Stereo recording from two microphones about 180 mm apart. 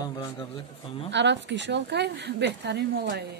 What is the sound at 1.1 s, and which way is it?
Speech, 80° right.